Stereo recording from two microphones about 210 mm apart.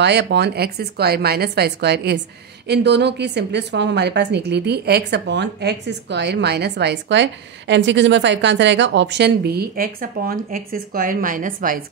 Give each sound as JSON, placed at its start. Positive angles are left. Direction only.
{"t": 0.0, "sound": "a woman's voice", "side_deg": -55}